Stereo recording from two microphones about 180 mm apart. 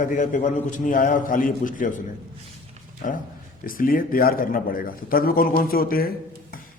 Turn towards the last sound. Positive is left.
turn(degrees=55)  # may be behind; listen again after turning